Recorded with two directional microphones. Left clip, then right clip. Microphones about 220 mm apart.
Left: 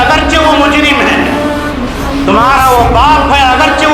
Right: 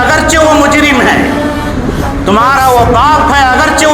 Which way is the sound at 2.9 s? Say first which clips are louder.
Even; 50° right (ahead or behind).